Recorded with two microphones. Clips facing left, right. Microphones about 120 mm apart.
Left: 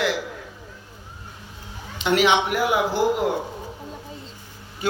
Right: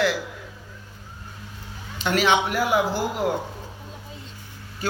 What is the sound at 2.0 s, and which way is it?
Speech, 20° left (ahead or behind).